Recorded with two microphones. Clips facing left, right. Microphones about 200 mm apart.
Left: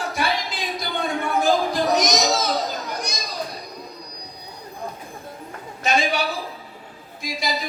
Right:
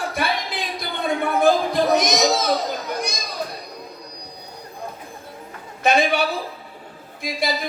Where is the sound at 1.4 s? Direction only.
55° right (ahead or behind).